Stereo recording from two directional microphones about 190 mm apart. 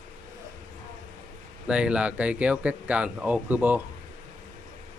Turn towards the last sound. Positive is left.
turn(degrees=-10)  # may be behind; listen again after turning